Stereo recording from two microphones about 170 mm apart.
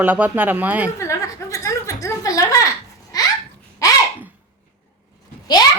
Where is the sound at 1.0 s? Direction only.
15° left (ahead or behind).